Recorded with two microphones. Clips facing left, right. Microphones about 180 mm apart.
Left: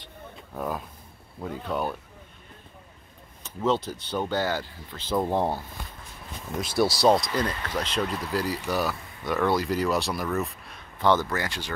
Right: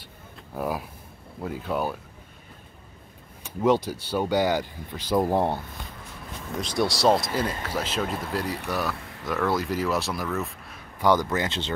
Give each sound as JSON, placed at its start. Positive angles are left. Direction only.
{"t": 0.6, "sound": "speech", "side_deg": -10}
{"t": 3.4, "sound": "speech", "side_deg": -10}
{"t": 6.6, "sound": "speech", "side_deg": 5}
{"t": 11.0, "sound": "speech", "side_deg": -15}